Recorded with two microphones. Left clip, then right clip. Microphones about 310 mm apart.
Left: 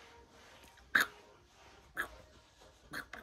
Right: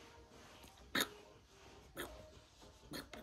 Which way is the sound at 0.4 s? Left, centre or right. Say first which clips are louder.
Even; centre.